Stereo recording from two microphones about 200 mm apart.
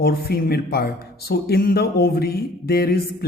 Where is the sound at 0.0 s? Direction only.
50° left (ahead or behind).